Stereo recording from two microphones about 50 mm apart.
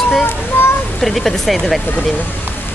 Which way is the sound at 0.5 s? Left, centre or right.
Left.